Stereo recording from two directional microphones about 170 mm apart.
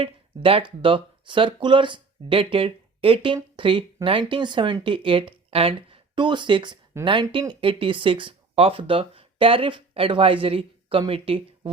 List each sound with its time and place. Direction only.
0.0 s speech: 30° right (ahead or behind)